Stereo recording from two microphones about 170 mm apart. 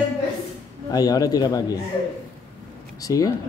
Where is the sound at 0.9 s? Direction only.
20° left (ahead or behind).